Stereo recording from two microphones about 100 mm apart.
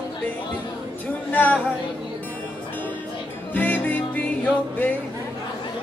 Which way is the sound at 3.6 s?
15° left (ahead or behind).